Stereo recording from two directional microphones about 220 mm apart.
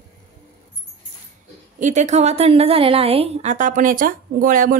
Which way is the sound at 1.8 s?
35° right (ahead or behind).